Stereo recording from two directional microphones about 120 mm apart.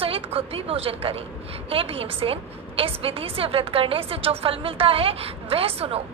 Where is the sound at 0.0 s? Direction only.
50° right (ahead or behind).